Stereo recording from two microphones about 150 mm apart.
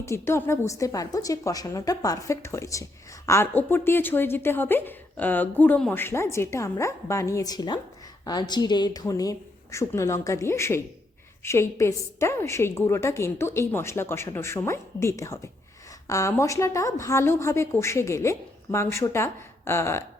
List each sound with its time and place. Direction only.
0.0 s a woman's voice: 15° left (ahead or behind)